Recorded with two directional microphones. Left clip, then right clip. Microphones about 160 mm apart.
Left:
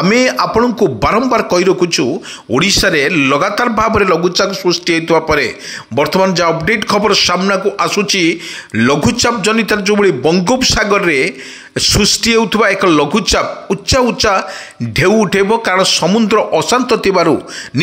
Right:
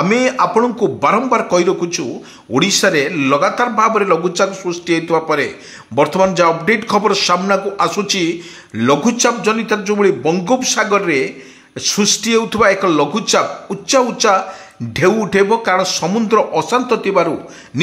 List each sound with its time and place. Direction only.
0.1 s a man's voice: 25° left (ahead or behind)